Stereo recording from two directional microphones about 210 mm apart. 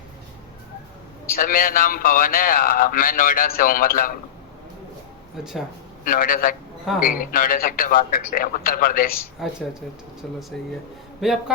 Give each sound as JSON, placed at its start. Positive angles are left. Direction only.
{"t": 1.3, "sound": "a man's voice", "side_deg": 40}
{"t": 5.4, "sound": "a man's voice", "side_deg": 0}
{"t": 6.1, "sound": "a man's voice", "side_deg": 40}
{"t": 10.5, "sound": "a man's voice", "side_deg": 0}